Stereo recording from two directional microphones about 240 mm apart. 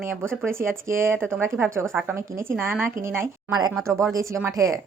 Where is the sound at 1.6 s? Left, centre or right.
Centre.